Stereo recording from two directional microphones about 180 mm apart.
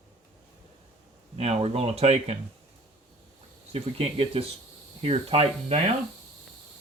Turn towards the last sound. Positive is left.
turn(degrees=-35)  # may be behind; listen again after turning